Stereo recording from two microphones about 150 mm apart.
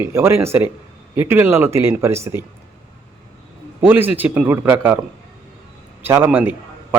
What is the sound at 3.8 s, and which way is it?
A man's voice, 15° right (ahead or behind).